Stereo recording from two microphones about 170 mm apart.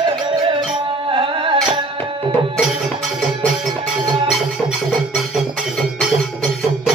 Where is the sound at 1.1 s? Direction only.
30° right (ahead or behind).